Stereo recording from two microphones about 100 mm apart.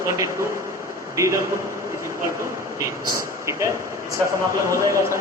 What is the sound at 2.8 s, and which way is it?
Speech, 30° right (ahead or behind).